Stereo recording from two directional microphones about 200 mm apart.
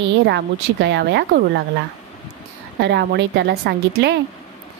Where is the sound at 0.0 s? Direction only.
60° right (ahead or behind).